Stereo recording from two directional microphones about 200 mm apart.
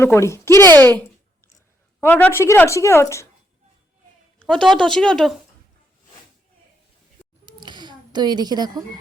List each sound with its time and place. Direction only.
0.0 s speech: 15° left (ahead or behind)
4.4 s speech: 5° left (ahead or behind)
7.4 s a sound: 20° right (ahead or behind)